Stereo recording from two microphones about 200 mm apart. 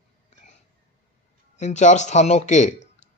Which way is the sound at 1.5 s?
35° left (ahead or behind).